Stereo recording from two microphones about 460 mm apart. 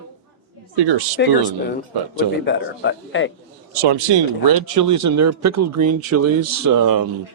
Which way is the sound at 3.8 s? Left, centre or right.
Right.